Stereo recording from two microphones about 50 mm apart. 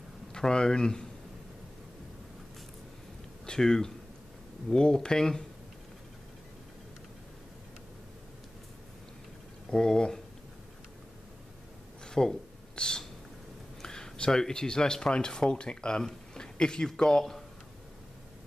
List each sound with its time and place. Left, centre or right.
0.3 s speech: centre
3.4 s speech: centre
9.7 s speech: centre
12.1 s a sound: centre
13.8 s speech: centre